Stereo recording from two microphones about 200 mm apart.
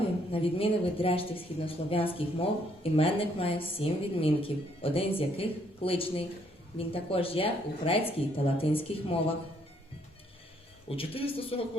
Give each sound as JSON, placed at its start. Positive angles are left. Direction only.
{"t": 0.3, "sound": "speech", "side_deg": 30}
{"t": 10.8, "sound": "speech", "side_deg": 30}